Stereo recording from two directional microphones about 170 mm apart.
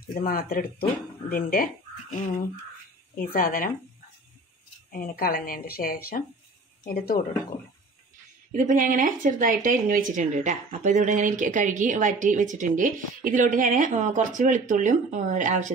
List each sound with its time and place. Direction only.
0.1 s speech: 60° left (ahead or behind)
3.3 s speech: 55° left (ahead or behind)
4.9 s speech: 60° left (ahead or behind)
8.5 s speech: 50° right (ahead or behind)